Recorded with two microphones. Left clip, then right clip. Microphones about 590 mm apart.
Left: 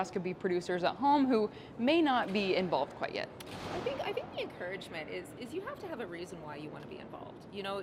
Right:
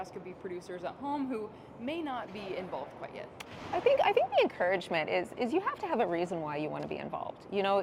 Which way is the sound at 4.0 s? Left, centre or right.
Right.